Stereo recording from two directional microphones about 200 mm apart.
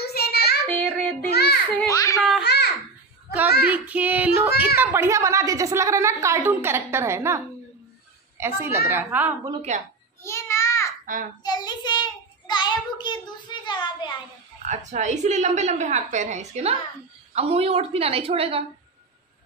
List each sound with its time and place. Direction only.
0.0 s child singing: 55° left (ahead or behind)
0.7 s child singing: 5° left (ahead or behind)
1.3 s children playing: 55° left (ahead or behind)
1.9 s a child's voice: 15° left (ahead or behind)
2.1 s a child's voice: centre (ahead or behind)
2.4 s a child's voice: 55° left (ahead or behind)
3.6 s a woman's voice: 5° right (ahead or behind)
9.7 s a woman's voice: 35° right (ahead or behind)
10.2 s a sound: 15° left (ahead or behind)
11.1 s a child's voice: 40° right (ahead or behind)
11.4 s child singing: 20° left (ahead or behind)
14.6 s a woman's voice: 35° right (ahead or behind)